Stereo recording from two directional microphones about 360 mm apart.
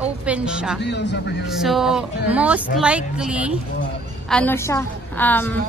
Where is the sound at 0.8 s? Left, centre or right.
Left.